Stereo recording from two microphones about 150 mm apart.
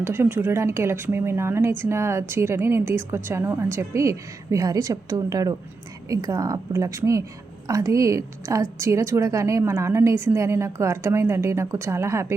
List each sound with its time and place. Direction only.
0.0 s a woman's voice: 15° right (ahead or behind)